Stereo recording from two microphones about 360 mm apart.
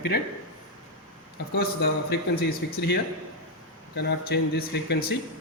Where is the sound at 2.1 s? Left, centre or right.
Left.